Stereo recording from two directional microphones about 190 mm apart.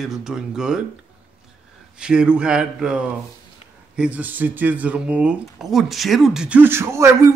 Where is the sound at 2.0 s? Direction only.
5° right (ahead or behind).